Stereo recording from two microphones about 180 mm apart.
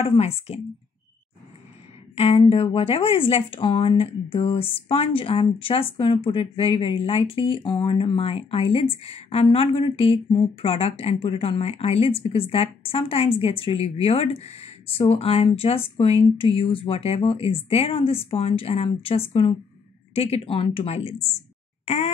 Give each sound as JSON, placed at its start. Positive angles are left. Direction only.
{"t": 0.0, "sound": "speech", "side_deg": 35}
{"t": 2.1, "sound": "speech", "side_deg": 35}
{"t": 21.8, "sound": "a sound", "side_deg": 40}